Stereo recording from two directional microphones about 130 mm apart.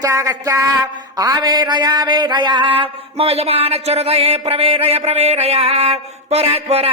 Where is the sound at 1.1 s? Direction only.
30° right (ahead or behind).